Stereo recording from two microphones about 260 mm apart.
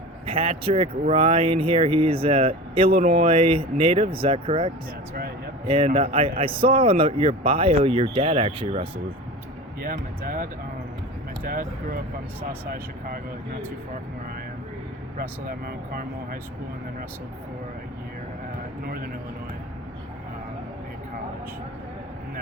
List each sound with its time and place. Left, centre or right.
0.3 s speech: right
5.7 s speech: centre
10.2 s speech: right
15.2 s speech: right